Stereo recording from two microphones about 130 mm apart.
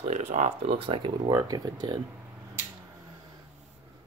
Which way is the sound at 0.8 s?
45° right (ahead or behind).